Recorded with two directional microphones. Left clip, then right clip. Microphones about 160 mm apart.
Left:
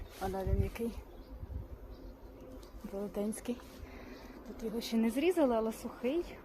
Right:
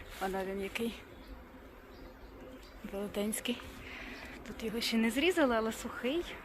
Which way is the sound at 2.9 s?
10° right (ahead or behind).